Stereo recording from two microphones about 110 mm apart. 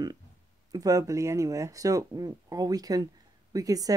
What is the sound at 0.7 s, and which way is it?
Speech, 35° right (ahead or behind).